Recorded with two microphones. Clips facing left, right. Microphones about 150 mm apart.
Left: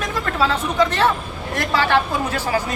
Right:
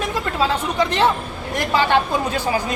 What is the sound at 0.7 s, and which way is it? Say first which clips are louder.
Speech: even; 15° right (ahead or behind).